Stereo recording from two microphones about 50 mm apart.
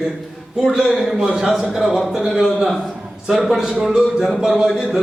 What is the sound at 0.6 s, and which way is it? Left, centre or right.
A man's voice, centre.